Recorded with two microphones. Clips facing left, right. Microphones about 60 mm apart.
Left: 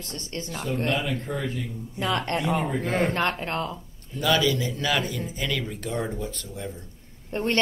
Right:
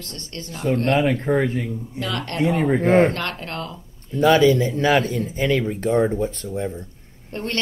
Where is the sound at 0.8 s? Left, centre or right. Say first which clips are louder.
Right 10 dB; right.